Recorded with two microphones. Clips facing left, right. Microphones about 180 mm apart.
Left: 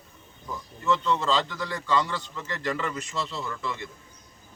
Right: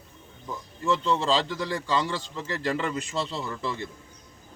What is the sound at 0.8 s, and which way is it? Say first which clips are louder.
A man's voice: right 1 dB; 30° right (ahead or behind).